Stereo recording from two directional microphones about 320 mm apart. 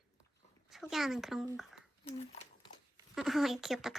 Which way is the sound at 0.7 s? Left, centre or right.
Centre.